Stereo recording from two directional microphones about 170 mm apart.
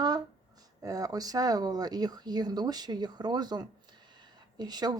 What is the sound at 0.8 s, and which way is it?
Speech, 20° right (ahead or behind).